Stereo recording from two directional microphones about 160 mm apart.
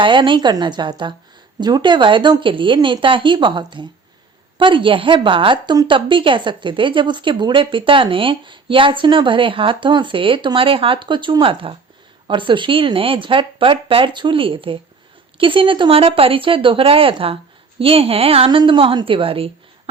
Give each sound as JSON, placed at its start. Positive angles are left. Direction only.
{"t": 0.0, "sound": "a woman's voice", "side_deg": -30}